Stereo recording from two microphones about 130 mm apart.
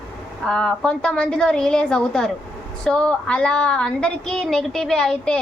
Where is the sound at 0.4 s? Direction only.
5° left (ahead or behind).